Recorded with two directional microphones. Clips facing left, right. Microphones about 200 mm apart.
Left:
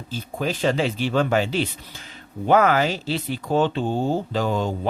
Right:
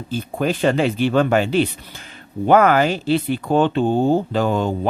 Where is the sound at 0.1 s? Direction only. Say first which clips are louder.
Right 5 dB; 55° right (ahead or behind).